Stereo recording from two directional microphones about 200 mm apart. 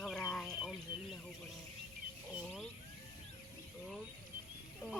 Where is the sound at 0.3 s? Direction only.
Centre (ahead or behind).